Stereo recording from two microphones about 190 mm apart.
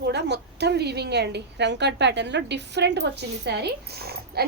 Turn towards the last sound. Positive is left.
turn(degrees=-55)  # may be behind; listen again after turning